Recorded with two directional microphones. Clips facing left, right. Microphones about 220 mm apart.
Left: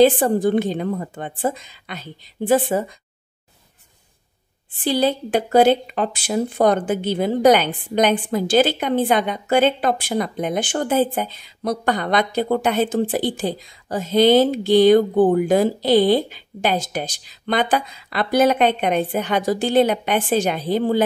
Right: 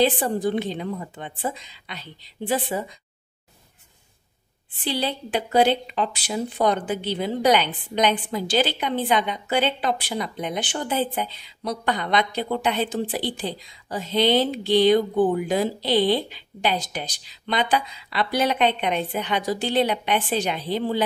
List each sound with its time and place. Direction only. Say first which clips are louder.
0.0 s a woman's voice: left 7 dB; 50° left (ahead or behind)
4.8 s a woman's voice: left 7 dB; 45° left (ahead or behind)